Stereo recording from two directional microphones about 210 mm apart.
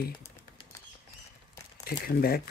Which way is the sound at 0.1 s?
20° left (ahead or behind).